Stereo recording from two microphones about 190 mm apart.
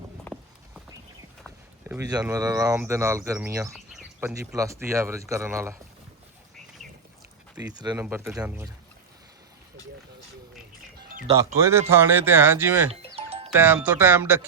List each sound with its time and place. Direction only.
0.3 s clip-clop: centre (ahead or behind)
1.9 s speech: 20° right (ahead or behind)
3.7 s a sound: centre (ahead or behind)
4.4 s speech: 15° right (ahead or behind)
7.9 s speech: 10° right (ahead or behind)
11.6 s speech: 15° right (ahead or behind)
13.1 s music: 30° right (ahead or behind)
13.5 s speech: 10° right (ahead or behind)